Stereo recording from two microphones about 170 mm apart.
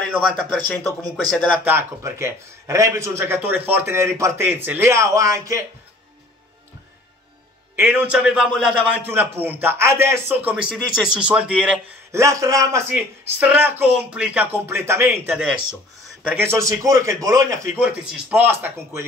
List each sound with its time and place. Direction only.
0.1 s speech: centre (ahead or behind)
1.6 s a man's voice: 15° right (ahead or behind)
7.7 s a man's voice: 10° right (ahead or behind)
12.1 s a man's voice: 20° right (ahead or behind)
17.7 s a man's voice: 5° right (ahead or behind)